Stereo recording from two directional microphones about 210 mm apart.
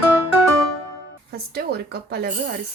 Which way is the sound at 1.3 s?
45° right (ahead or behind).